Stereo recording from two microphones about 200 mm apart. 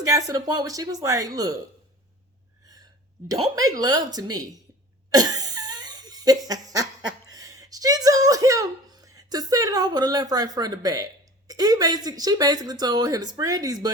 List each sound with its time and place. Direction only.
0.1 s speech: 15° right (ahead or behind)
3.4 s speech: 15° right (ahead or behind)
5.1 s laughter: 20° right (ahead or behind)
7.3 s speech: 15° right (ahead or behind)